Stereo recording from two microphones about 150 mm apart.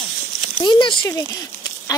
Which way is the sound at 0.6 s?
30° left (ahead or behind).